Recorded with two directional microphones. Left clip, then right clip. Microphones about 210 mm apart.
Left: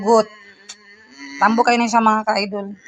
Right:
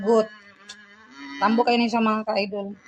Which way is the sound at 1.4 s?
15° left (ahead or behind).